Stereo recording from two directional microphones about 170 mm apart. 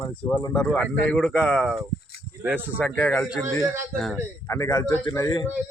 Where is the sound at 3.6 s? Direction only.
15° right (ahead or behind).